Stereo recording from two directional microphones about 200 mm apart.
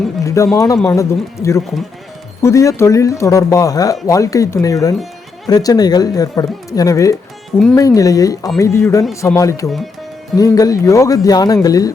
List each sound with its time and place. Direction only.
0.5 s speech: 15° left (ahead or behind)